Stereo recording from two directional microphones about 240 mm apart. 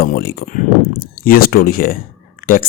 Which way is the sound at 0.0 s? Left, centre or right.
Left.